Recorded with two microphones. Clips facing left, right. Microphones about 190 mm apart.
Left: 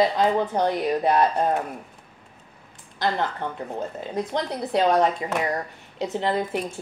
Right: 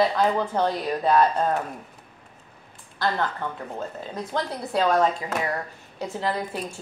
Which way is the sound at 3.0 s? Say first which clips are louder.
Left 1 dB; 20° left (ahead or behind).